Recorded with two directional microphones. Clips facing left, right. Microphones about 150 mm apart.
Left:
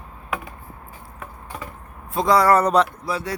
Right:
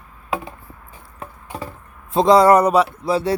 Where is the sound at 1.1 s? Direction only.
30° right (ahead or behind).